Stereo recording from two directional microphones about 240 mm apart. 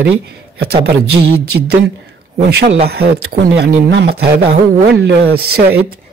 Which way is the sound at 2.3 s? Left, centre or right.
Right.